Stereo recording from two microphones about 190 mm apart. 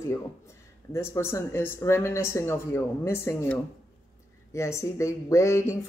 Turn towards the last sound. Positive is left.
turn(degrees=15)  # may be behind; listen again after turning